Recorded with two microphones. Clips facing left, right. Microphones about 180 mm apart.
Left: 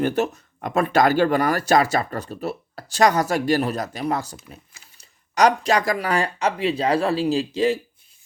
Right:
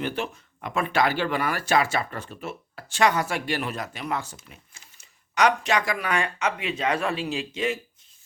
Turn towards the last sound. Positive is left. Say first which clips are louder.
# left 8 dB
turn(degrees=35)  # may be behind; listen again after turning